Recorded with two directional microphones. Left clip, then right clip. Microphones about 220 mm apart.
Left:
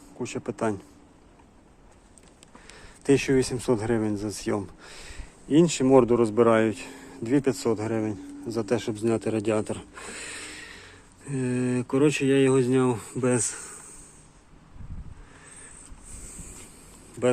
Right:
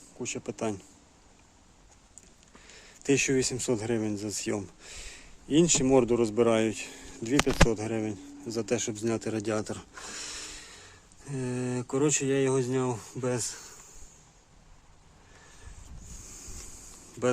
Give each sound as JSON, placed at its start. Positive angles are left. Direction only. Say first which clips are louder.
{"t": 0.2, "sound": "speech", "louder": "left 4 dB", "side_deg": -10}
{"t": 2.7, "sound": "speech", "louder": "left 4 dB", "side_deg": -15}
{"t": 13.5, "sound": "insect", "louder": "left 4 dB", "side_deg": 0}